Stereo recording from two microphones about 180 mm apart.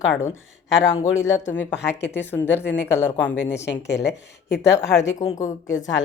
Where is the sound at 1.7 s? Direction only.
70° left (ahead or behind).